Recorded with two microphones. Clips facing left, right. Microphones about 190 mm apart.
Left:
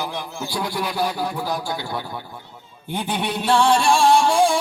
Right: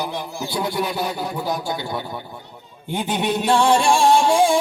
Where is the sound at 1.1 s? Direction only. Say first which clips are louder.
Even; 20° right (ahead or behind).